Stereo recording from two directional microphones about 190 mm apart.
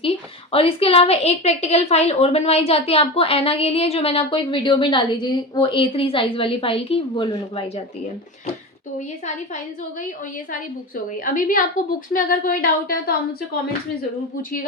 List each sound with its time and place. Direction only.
0.5 s a woman's voice: 30° left (ahead or behind)
9.0 s a woman's voice: 40° left (ahead or behind)
11.2 s a woman's voice: 45° left (ahead or behind)